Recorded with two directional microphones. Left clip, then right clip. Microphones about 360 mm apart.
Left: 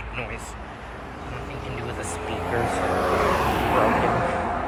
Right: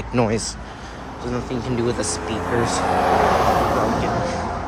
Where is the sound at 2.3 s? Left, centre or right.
Right.